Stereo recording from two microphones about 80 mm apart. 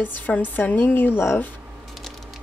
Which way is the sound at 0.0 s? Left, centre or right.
Left.